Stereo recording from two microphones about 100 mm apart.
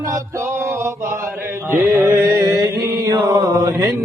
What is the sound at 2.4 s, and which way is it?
Chant, 40° right (ahead or behind).